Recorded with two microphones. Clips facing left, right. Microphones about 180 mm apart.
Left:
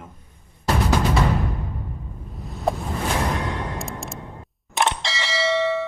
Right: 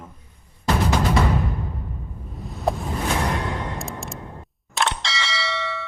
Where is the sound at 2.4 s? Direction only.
Centre (ahead or behind).